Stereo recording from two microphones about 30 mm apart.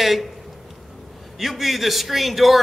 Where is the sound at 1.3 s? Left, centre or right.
Centre.